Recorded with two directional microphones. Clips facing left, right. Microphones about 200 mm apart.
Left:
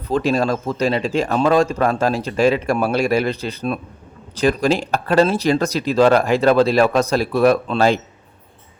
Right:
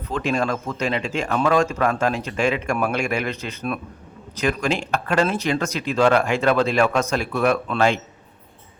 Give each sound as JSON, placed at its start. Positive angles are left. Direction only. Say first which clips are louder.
{"t": 0.1, "sound": "speech", "louder": "left 5 dB", "side_deg": 35}